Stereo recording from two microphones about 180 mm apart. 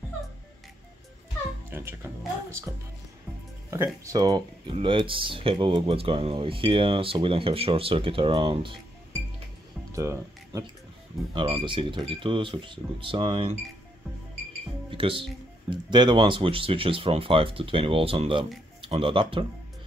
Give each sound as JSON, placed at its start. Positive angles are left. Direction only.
{"t": 1.7, "sound": "music", "side_deg": -10}
{"t": 3.7, "sound": "speech", "side_deg": -15}
{"t": 9.9, "sound": "speech", "side_deg": -15}
{"t": 14.9, "sound": "speech", "side_deg": -30}